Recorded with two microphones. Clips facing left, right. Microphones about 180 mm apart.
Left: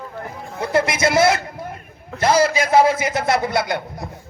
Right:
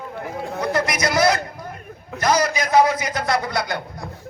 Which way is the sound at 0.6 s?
25° left (ahead or behind).